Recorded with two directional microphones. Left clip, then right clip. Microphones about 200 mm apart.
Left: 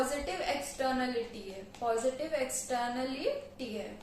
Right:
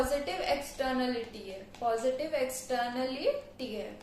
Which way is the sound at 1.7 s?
10° right (ahead or behind).